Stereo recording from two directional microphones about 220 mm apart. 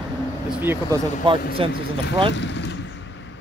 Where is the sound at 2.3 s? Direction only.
55° left (ahead or behind).